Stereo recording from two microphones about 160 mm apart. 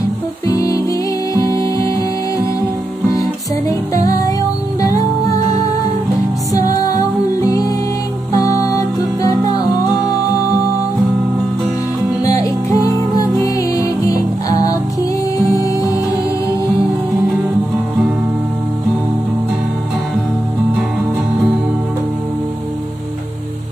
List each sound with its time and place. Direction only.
0.6 s music: 20° left (ahead or behind)
3.1 s music: 20° left (ahead or behind)
6.5 s music: 20° left (ahead or behind)
12.3 s music: 20° left (ahead or behind)